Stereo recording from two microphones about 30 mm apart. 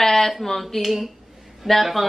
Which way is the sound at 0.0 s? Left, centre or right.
Centre.